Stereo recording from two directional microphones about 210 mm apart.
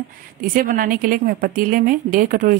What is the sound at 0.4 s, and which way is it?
A woman's voice, 40° right (ahead or behind).